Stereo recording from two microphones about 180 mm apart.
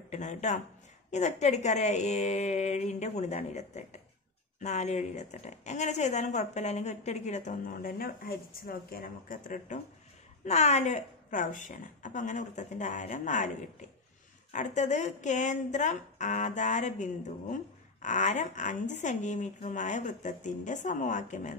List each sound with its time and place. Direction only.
0.1 s a woman's voice: 40° left (ahead or behind)